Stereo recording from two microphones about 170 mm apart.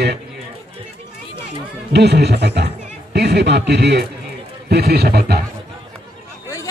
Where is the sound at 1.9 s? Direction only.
80° right.